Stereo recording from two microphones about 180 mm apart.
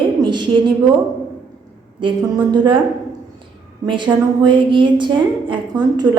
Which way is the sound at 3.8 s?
25° right (ahead or behind).